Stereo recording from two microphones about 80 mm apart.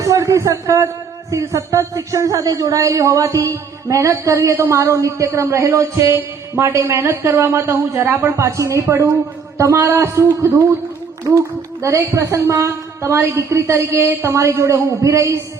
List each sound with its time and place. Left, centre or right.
0.0 s speech: right